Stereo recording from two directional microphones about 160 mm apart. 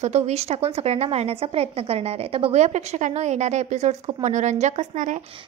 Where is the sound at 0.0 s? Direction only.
45° right (ahead or behind).